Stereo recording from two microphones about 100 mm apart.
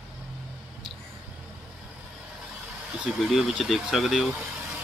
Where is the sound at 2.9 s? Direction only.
5° right (ahead or behind).